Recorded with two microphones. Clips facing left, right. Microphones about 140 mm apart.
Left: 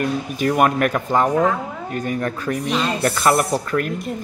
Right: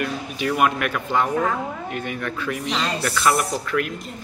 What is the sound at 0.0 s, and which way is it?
Speech, 40° left (ahead or behind).